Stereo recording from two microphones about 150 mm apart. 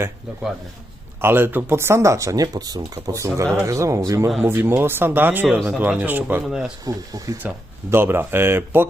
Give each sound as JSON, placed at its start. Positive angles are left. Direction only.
{"t": 1.2, "sound": "speech", "side_deg": -15}
{"t": 6.8, "sound": "speech", "side_deg": -25}
{"t": 7.4, "sound": "speech", "side_deg": -15}